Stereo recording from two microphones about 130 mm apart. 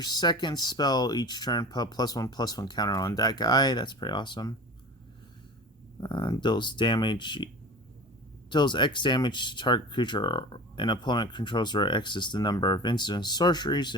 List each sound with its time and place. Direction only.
0.0 s speech: 35° left (ahead or behind)
6.0 s speech: 35° left (ahead or behind)